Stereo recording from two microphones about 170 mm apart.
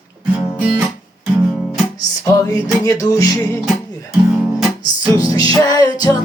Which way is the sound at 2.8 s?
20° left (ahead or behind).